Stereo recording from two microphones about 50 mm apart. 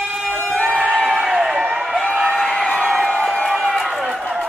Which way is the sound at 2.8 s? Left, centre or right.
Centre.